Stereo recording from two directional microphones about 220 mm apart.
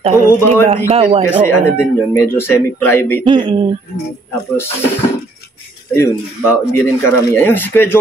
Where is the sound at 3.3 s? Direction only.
20° right (ahead or behind).